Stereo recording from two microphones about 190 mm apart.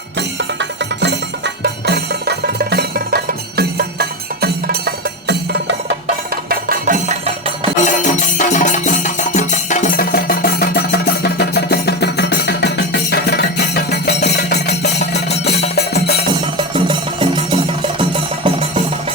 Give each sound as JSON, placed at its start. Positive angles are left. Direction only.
{"t": 0.2, "sound": "music", "side_deg": -70}
{"t": 7.9, "sound": "music", "side_deg": 40}
{"t": 16.7, "sound": "music", "side_deg": -25}